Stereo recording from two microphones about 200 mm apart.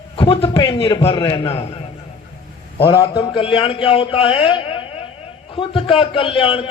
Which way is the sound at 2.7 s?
25° left (ahead or behind).